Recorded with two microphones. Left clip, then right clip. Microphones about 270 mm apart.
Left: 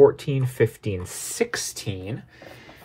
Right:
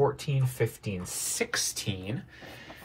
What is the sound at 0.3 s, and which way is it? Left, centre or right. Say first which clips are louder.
Speech: left 8 dB; left.